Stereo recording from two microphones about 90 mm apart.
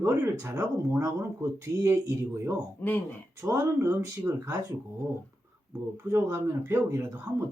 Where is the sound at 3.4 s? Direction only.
35° right (ahead or behind).